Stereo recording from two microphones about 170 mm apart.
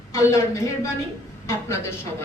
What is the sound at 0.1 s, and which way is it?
Speech, 15° left (ahead or behind).